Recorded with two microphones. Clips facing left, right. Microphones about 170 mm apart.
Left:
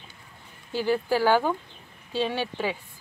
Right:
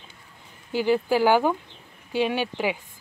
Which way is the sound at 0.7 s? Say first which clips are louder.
Right 3 dB; 15° right (ahead or behind).